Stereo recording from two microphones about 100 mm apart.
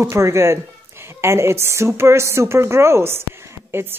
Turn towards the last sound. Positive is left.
turn(degrees=-25)  # may be behind; listen again after turning